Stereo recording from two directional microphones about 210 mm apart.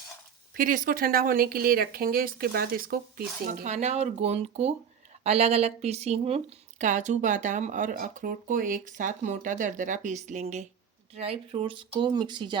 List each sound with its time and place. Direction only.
0.5 s a woman's voice: 40° right (ahead or behind); by 12.5 s 20° right (ahead or behind)